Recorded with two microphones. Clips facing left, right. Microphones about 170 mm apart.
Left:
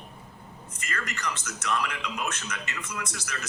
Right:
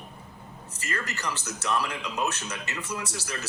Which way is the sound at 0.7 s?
30° right (ahead or behind).